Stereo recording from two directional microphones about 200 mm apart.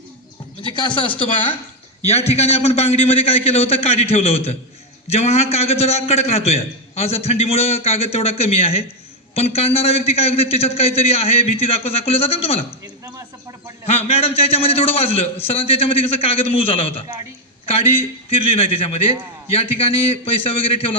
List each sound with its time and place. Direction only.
0.6 s a man's voice: 25° left (ahead or behind)
13.8 s a man's voice: 30° left (ahead or behind)
18.3 s a man's voice: 25° left (ahead or behind)